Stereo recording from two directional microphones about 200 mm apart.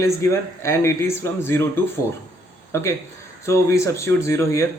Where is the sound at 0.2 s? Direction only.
15° left (ahead or behind).